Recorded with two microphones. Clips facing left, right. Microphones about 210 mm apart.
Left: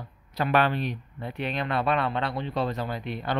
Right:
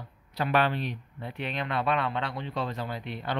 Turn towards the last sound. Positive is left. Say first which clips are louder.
# left 3 dB
turn(degrees=45)  # may be behind; listen again after turning